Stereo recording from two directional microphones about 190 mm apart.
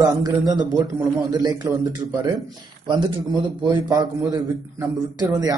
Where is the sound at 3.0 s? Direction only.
20° right (ahead or behind).